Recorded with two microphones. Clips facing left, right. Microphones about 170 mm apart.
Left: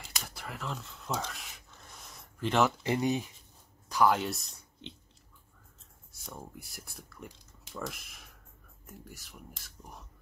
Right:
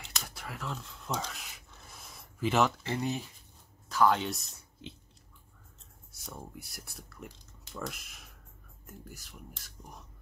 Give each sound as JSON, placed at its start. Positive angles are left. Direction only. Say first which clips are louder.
{"t": 0.2, "sound": "a sound", "louder": "left 1 dB", "side_deg": 0}
{"t": 2.8, "sound": "speech", "louder": "left 4 dB", "side_deg": 15}
{"t": 6.2, "sound": "speech", "louder": "even", "side_deg": 0}